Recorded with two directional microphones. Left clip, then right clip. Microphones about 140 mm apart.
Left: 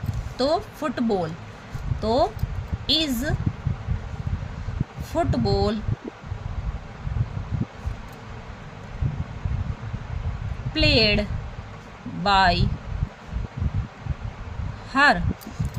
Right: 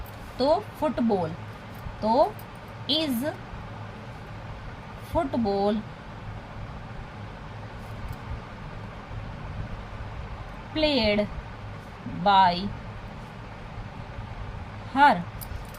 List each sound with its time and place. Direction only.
0.3 s speech: 30° left (ahead or behind)
2.0 s speech: 45° left (ahead or behind)
5.1 s speech: 45° left (ahead or behind)
10.8 s a woman's voice: 40° left (ahead or behind)
14.9 s a woman's voice: 40° left (ahead or behind)